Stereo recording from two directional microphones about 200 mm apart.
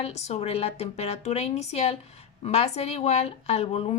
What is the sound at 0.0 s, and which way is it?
Speech, 30° left (ahead or behind).